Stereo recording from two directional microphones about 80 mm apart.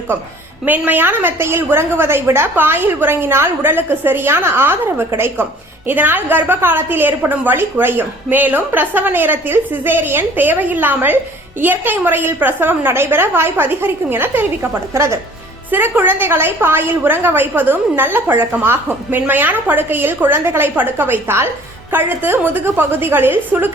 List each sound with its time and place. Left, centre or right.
0.6 s a woman's voice: right